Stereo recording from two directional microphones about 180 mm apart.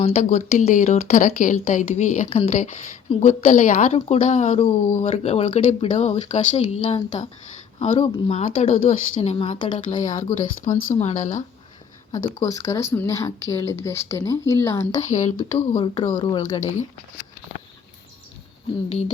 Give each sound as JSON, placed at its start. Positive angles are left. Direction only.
{"t": 0.0, "sound": "speech", "side_deg": 35}
{"t": 8.4, "sound": "speech", "side_deg": 45}
{"t": 9.7, "sound": "speech", "side_deg": 45}
{"t": 12.1, "sound": "speech", "side_deg": 20}
{"t": 15.5, "sound": "speech", "side_deg": 30}
{"t": 18.9, "sound": "speech", "side_deg": 40}